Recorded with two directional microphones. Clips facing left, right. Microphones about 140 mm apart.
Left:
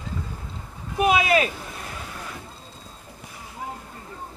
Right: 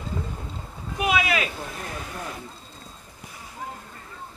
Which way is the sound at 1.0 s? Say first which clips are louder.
Left 5 dB; 35° left (ahead or behind).